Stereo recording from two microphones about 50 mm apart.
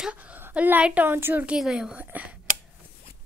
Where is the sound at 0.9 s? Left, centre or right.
Right.